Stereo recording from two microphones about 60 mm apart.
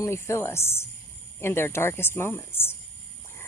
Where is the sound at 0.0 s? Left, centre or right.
Left.